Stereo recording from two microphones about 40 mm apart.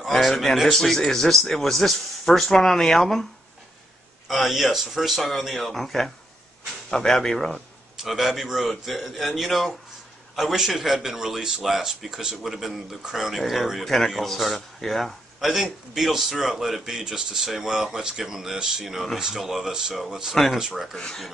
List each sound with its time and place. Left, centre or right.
0.0 s a sound: centre
0.7 s speech: centre
4.3 s a man's voice: centre
8.0 s a man's voice: centre
12.4 s a man's voice: centre
20.9 s speech: centre